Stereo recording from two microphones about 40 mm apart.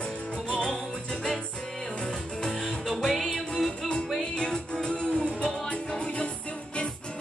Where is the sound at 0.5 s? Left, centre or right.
Left.